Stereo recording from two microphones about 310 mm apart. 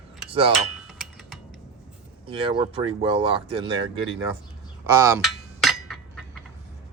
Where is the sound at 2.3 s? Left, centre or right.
Centre.